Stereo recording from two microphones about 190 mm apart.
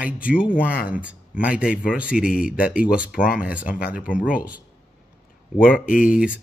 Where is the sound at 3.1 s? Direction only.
50° left (ahead or behind).